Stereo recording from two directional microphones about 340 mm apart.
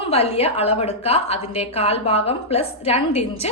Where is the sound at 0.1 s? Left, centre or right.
Centre.